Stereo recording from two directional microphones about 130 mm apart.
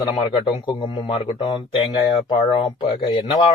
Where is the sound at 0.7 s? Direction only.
40° left (ahead or behind).